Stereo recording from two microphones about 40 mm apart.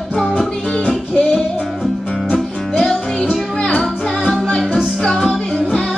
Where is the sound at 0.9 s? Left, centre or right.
Left.